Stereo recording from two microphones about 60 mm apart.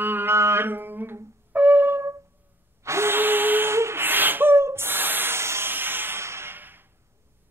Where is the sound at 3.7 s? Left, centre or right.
Right.